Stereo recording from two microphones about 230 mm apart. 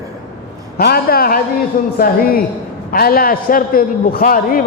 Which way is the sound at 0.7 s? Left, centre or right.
Left.